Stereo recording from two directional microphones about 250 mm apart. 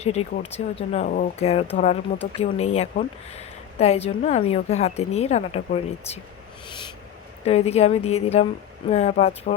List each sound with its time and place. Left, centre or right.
0.0 s a woman's voice: left
6.7 s owl: centre
7.4 s a woman's voice: left